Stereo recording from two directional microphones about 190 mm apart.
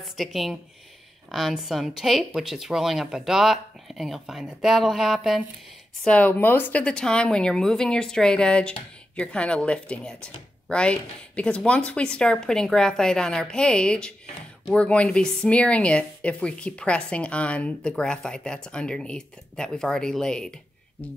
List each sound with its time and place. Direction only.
0.2 s speech: centre (ahead or behind)